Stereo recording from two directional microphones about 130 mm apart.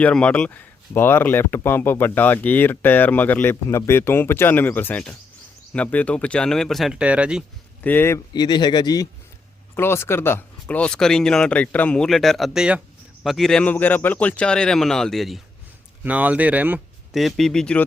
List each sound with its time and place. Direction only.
0.0 s a man's voice: 10° left (ahead or behind); by 7.4 s 10° right (ahead or behind)
7.9 s speech: 15° left (ahead or behind)
8.3 s speech: 35° left (ahead or behind)
9.7 s a man's voice: 20° left (ahead or behind); by 15.4 s centre (ahead or behind)
16.0 s speech: 10° right (ahead or behind)
17.1 s a man's voice: centre (ahead or behind)